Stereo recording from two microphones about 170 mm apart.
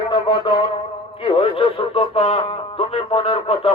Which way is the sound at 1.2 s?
35° left (ahead or behind).